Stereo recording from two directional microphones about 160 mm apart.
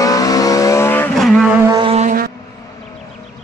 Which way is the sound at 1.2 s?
Centre (ahead or behind).